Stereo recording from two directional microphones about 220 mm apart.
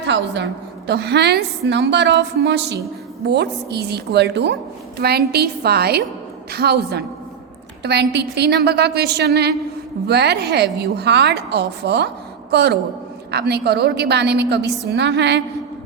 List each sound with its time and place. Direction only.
0.0 s a woman's voice: 50° right (ahead or behind)